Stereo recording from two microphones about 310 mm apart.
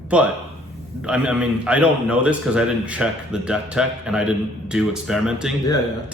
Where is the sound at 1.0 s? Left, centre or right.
Centre.